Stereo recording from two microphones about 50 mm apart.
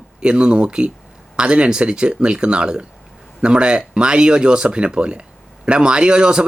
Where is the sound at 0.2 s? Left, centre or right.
Centre.